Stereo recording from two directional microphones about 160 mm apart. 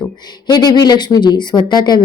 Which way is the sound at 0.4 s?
25° left (ahead or behind).